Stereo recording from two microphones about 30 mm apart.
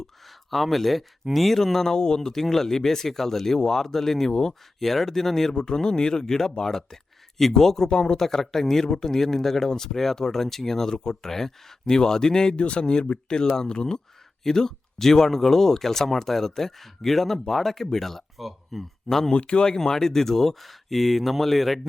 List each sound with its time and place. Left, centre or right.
0.3 s speech: centre; by 2.3 s left
2.3 s speech: centre
4.8 s speech: centre
5.5 s speech: left
7.9 s speech: left
8.2 s speech: centre
12.5 s speech: left
12.8 s speech: left; by 18.2 s centre
18.3 s speech: centre
19.0 s speech: centre
19.3 s speech: left
19.6 s speech: left; by 21.8 s centre